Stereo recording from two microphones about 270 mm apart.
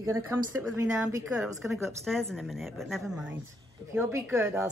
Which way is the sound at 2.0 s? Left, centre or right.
Centre.